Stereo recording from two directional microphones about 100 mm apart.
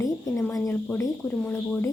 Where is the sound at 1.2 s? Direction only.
15° left (ahead or behind).